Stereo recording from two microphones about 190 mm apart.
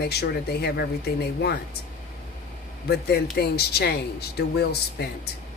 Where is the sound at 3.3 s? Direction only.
55° left (ahead or behind).